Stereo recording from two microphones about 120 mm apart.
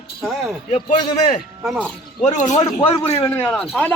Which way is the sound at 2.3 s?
90° left.